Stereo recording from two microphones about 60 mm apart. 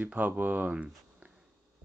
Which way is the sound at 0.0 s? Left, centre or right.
Right.